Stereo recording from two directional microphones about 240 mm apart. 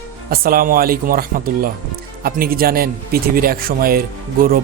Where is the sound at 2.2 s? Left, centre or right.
Right.